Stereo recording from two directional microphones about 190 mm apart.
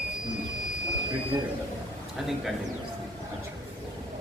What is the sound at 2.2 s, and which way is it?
Speech, centre (ahead or behind).